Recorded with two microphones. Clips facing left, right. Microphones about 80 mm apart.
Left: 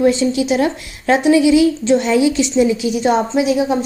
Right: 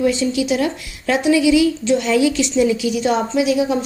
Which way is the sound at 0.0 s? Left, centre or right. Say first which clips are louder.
Left 3 dB; left.